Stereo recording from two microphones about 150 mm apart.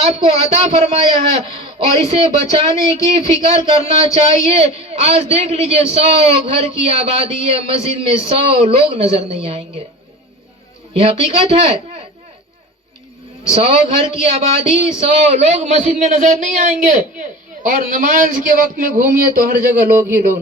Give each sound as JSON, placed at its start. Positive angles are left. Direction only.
{"t": 0.0, "sound": "a man's voice", "side_deg": -40}
{"t": 11.0, "sound": "a man's voice", "side_deg": -40}
{"t": 13.5, "sound": "a man's voice", "side_deg": -40}